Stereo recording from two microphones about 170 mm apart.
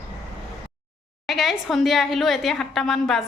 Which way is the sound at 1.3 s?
Centre (ahead or behind).